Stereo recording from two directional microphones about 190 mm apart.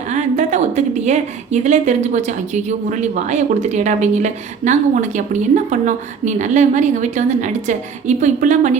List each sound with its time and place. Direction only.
0.1 s a woman's voice: 40° right (ahead or behind)